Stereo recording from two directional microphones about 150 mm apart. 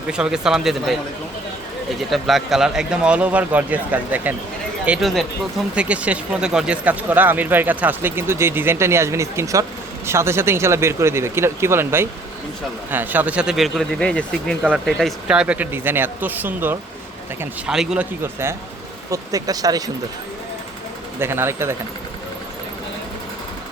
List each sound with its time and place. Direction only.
0.1 s speech: 5° right (ahead or behind)
2.0 s speech: centre (ahead or behind)
4.9 s speech: centre (ahead or behind); by 19.8 s 25° right (ahead or behind)
21.2 s speech: 15° right (ahead or behind)